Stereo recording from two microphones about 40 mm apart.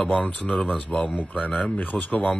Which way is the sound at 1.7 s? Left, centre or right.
Left.